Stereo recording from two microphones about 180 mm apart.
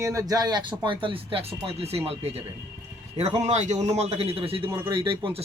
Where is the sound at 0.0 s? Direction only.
20° right (ahead or behind).